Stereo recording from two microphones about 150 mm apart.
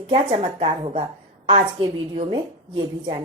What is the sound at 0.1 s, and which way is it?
Speech, 40° right (ahead or behind).